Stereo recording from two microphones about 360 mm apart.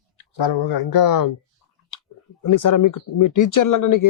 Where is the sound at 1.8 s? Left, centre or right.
Left.